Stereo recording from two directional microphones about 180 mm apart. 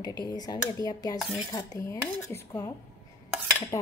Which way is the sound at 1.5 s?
20° left (ahead or behind).